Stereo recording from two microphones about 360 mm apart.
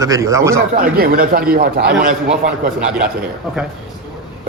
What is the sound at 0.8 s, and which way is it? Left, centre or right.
A man's voice, right.